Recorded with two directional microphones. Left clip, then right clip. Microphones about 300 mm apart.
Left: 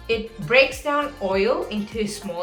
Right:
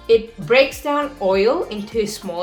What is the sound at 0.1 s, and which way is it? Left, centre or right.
Speech, right.